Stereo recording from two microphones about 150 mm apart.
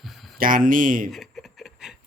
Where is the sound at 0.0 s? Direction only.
Centre (ahead or behind).